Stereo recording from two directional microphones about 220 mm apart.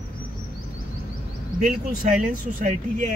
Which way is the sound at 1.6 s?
40° right (ahead or behind).